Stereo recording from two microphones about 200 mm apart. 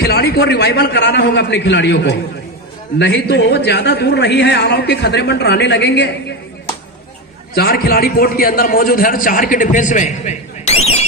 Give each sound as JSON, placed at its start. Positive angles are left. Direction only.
{"t": 0.0, "sound": "a man's voice", "side_deg": 55}
{"t": 7.5, "sound": "a man's voice", "side_deg": 50}